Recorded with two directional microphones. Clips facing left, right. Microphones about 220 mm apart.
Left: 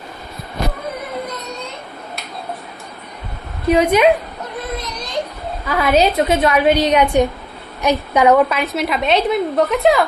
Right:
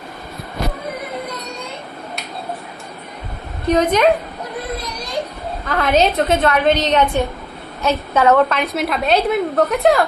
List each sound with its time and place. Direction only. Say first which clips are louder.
3.6 s a woman's voice: left 2 dB; 10° left (ahead or behind)
5.7 s a woman's voice: left 1 dB; 10° left (ahead or behind)